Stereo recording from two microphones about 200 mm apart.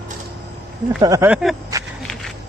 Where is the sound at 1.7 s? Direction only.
15° right (ahead or behind).